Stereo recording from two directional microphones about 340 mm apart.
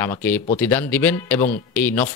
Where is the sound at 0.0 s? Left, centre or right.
Centre.